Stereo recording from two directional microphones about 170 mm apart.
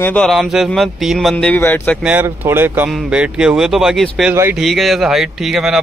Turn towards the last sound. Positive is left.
turn(degrees=0)  # may be behind; listen again after turning